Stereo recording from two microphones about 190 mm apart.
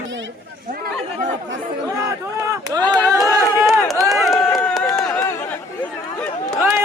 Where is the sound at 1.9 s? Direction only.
15° right (ahead or behind).